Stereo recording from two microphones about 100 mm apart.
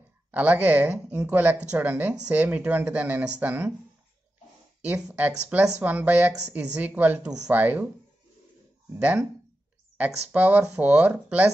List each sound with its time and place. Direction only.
0.3 s speech: 15° right (ahead or behind)
4.8 s speech: 15° right (ahead or behind)
9.9 s speech: 15° right (ahead or behind)